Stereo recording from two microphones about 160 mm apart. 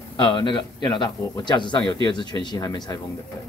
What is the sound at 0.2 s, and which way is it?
Speech, 30° left (ahead or behind).